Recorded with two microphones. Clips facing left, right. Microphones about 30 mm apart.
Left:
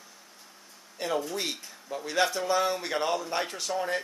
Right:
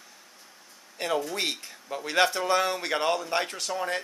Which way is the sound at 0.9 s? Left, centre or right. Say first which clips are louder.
Right 2 dB; centre.